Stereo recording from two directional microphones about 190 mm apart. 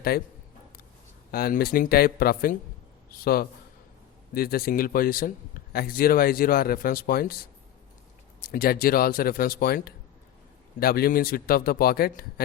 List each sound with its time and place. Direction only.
1.3 s speech: 55° left (ahead or behind)